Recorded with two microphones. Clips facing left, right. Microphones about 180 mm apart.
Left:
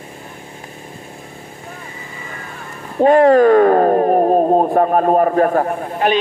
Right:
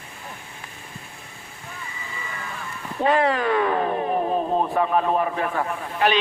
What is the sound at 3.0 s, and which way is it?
Speech, 45° left (ahead or behind).